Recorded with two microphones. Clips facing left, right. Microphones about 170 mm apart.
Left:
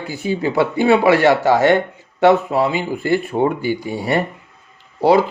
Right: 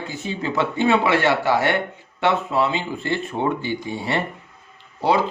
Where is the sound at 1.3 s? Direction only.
40° left (ahead or behind).